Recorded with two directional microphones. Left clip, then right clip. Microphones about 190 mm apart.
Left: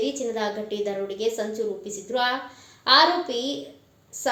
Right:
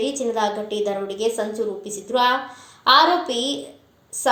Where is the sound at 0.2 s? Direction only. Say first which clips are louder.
Right 5 dB; 15° right (ahead or behind).